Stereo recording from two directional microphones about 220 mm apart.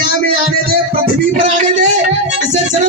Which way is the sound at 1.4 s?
35° right (ahead or behind).